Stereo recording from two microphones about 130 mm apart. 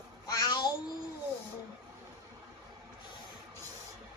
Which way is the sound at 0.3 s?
30° left (ahead or behind).